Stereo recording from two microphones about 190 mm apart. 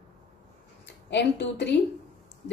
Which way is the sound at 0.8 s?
65° left (ahead or behind).